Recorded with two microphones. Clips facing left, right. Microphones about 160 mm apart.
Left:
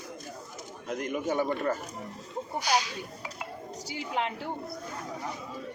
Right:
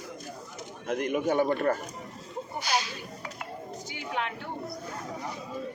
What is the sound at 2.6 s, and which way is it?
Speech, 15° left (ahead or behind).